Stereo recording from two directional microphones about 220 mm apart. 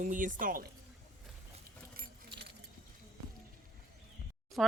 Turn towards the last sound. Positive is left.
turn(degrees=0)  # may be behind; listen again after turning